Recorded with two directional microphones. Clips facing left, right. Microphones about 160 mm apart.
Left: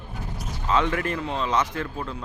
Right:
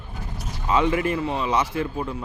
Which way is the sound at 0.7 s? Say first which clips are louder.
Right 3 dB; 10° right (ahead or behind).